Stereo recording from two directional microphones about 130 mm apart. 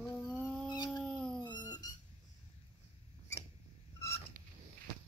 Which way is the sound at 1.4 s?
35° left (ahead or behind).